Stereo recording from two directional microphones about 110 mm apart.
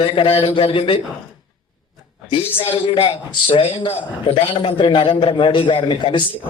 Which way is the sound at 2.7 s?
50° left (ahead or behind).